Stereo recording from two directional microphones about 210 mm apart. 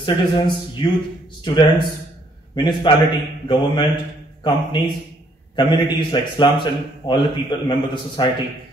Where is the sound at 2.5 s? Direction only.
20° left (ahead or behind).